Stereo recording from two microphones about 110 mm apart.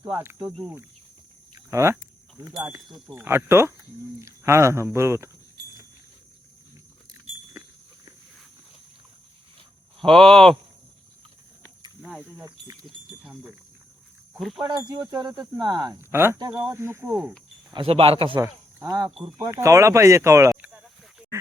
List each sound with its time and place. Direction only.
0.0 s speech: 20° right (ahead or behind)
2.6 s speech: 10° right (ahead or behind)
3.2 s speech: 20° right (ahead or behind)
10.0 s speech: 5° left (ahead or behind)
12.0 s speech: 5° right (ahead or behind)
12.5 s speech: 35° right (ahead or behind)
12.8 s speech: 5° right (ahead or behind)
14.6 s speech: 40° right (ahead or behind)
15.9 s speech: 20° right (ahead or behind)
17.7 s speech: 60° right (ahead or behind)
18.4 s speech: 30° right (ahead or behind)